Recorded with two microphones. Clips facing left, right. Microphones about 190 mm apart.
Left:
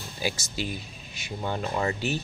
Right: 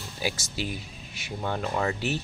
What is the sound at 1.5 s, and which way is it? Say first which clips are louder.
Speech: even; 10° left (ahead or behind).